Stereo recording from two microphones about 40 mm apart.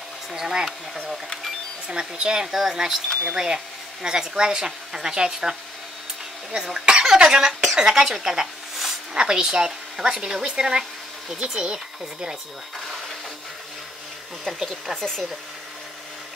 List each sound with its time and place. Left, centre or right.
0.3 s speech: centre
1.9 s speech: right
9.1 s speech: centre
15.0 s speech: centre